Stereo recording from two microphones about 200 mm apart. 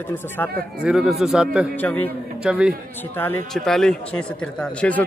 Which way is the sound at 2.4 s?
5° right (ahead or behind).